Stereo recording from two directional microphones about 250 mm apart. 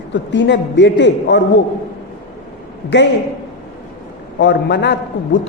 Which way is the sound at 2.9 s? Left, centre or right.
Left.